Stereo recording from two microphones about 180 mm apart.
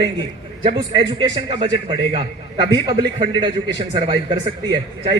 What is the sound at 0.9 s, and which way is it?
A man's voice, 30° right (ahead or behind).